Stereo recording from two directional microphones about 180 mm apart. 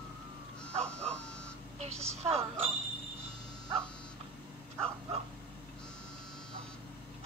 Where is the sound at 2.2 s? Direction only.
35° right (ahead or behind).